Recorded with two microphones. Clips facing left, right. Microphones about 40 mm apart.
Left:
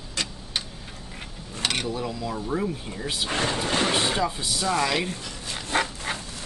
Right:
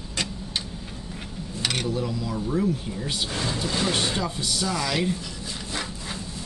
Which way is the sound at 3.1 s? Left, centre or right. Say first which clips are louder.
Left 3 dB; left.